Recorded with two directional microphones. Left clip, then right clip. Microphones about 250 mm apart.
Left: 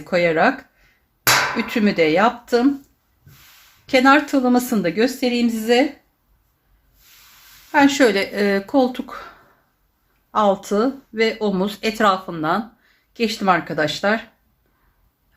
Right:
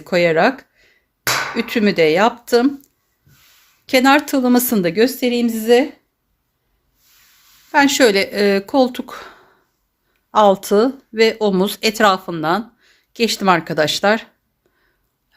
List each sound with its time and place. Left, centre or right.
0.0 s speech: right
1.5 s speech: right
3.8 s speech: right
7.7 s speech: right